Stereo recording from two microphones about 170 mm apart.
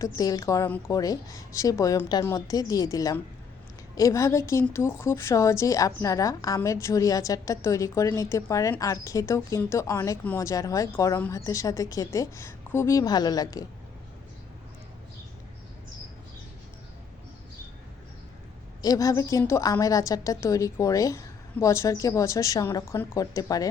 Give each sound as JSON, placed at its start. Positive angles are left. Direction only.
{"t": 0.0, "sound": "a woman's voice", "side_deg": 20}
{"t": 18.8, "sound": "a woman's voice", "side_deg": 20}